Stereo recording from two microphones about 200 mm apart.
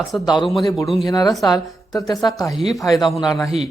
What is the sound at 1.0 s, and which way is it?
A woman's voice, 20° left (ahead or behind).